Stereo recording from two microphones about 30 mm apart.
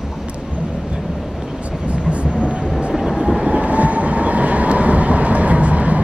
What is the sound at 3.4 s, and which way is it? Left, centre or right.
Train, right.